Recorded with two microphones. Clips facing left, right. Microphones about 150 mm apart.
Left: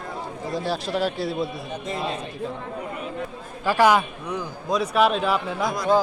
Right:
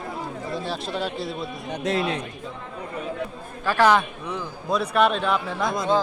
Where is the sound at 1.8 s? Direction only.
80° right.